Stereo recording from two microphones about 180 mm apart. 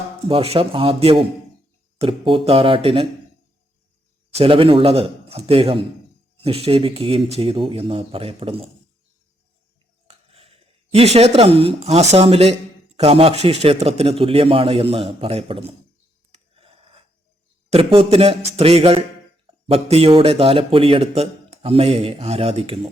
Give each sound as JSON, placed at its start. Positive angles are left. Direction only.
{"t": 0.3, "sound": "a man's voice", "side_deg": -30}
{"t": 4.4, "sound": "a man's voice", "side_deg": -30}
{"t": 10.1, "sound": "a man's voice", "side_deg": -35}
{"t": 16.6, "sound": "a sound", "side_deg": -30}
{"t": 17.7, "sound": "a man's voice", "side_deg": -35}